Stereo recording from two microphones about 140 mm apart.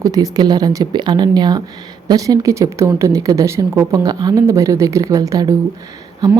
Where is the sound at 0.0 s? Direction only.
25° right (ahead or behind).